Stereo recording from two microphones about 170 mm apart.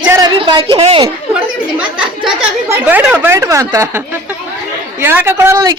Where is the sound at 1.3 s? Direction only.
10° right (ahead or behind).